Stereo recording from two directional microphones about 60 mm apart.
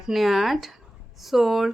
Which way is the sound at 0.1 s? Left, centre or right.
Centre.